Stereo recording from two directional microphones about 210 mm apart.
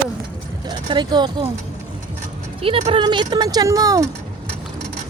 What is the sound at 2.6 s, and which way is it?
Speech, 25° right (ahead or behind).